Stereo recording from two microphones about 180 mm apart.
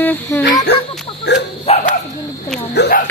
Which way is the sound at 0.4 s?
60° left (ahead or behind).